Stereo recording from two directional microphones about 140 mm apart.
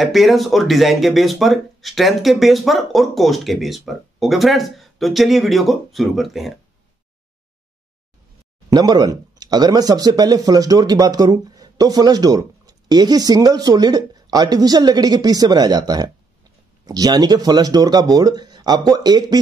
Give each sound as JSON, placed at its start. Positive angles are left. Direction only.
{"t": 0.0, "sound": "speech", "side_deg": 0}
{"t": 8.6, "sound": "speech", "side_deg": -25}